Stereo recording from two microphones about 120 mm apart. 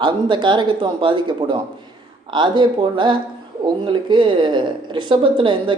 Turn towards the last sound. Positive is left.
turn(degrees=-45)  # may be behind; listen again after turning